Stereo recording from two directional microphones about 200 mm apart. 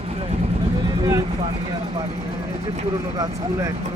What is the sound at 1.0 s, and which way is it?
Vehicle, 15° right (ahead or behind).